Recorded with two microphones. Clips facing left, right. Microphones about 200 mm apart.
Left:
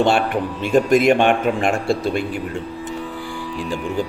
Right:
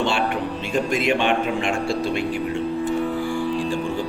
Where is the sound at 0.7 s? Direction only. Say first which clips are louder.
Left 8 dB; 45° left (ahead or behind).